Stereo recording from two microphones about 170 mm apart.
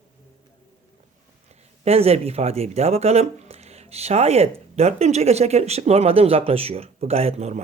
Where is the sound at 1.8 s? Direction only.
35° right (ahead or behind).